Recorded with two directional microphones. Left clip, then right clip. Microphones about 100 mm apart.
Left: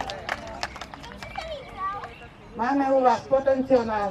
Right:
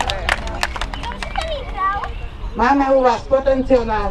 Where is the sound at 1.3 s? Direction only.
15° left (ahead or behind).